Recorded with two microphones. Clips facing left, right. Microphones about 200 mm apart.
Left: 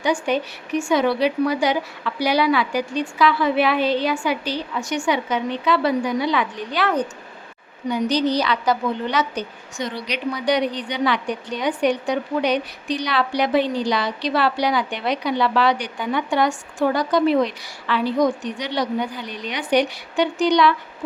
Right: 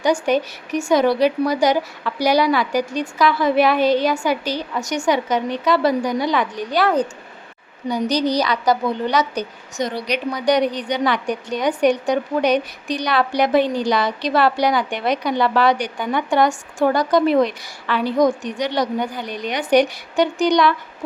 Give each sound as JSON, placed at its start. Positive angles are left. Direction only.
{"t": 0.0, "sound": "a woman's voice", "side_deg": -40}